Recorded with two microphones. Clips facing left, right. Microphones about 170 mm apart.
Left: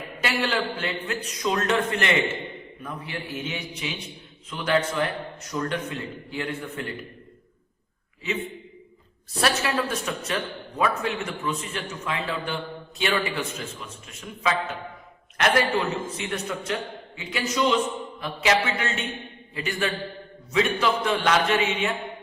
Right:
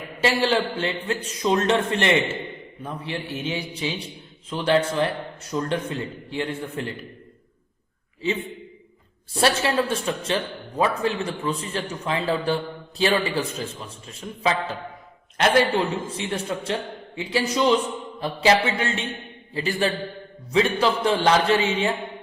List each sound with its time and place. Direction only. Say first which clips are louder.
0.2 s a man's voice: right 5 dB; 30° right (ahead or behind)
9.3 s a man's voice: right 3 dB; 30° right (ahead or behind)